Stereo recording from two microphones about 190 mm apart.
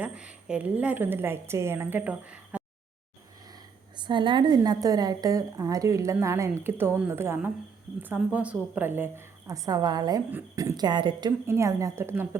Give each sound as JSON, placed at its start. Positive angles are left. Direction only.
{"t": 0.0, "sound": "a woman's voice", "side_deg": -5}
{"t": 3.9, "sound": "a woman's voice", "side_deg": -25}